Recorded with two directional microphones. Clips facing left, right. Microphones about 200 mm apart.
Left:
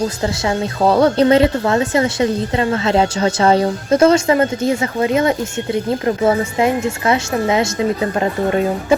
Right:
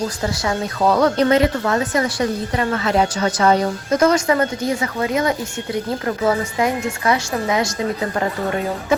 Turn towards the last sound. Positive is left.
turn(degrees=25)  # may be behind; listen again after turning